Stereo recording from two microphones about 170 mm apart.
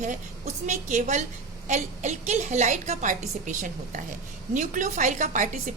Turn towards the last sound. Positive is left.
turn(degrees=-45)  # may be behind; listen again after turning